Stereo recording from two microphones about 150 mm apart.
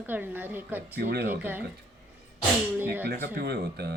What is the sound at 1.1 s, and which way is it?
Speech, 90° right.